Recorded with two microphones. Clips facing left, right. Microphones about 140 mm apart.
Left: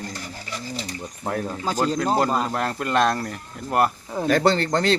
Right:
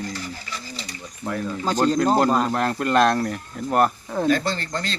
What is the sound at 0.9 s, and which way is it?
Pigeon, 50° left (ahead or behind).